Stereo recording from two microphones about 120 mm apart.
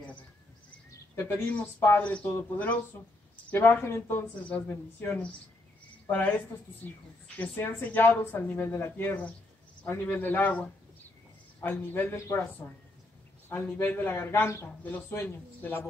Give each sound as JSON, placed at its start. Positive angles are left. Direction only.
{"t": 1.1, "sound": "a man's voice", "side_deg": 20}